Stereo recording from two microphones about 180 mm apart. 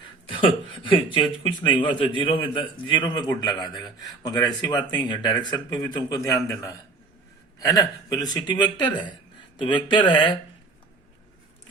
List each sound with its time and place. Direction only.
0.3 s a man's voice: 30° left (ahead or behind)